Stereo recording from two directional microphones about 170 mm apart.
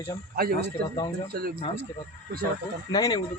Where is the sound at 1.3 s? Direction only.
65° right (ahead or behind).